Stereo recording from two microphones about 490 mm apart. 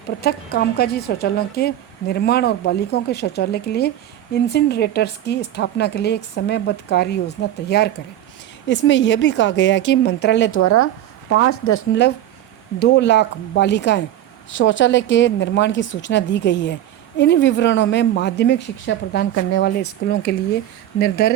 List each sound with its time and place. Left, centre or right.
0.2 s speech: centre